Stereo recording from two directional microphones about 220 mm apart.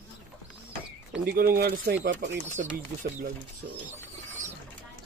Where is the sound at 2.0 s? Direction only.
55° right (ahead or behind).